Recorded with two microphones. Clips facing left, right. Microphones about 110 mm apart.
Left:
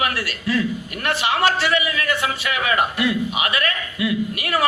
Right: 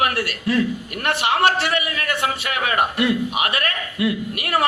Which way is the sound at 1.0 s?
60° right (ahead or behind).